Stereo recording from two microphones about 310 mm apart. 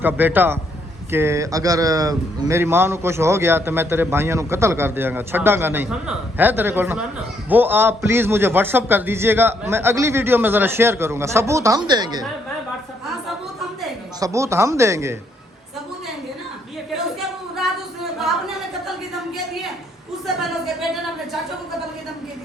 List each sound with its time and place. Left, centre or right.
0.0 s speech: centre
14.2 s speech: centre
18.2 s a sound: centre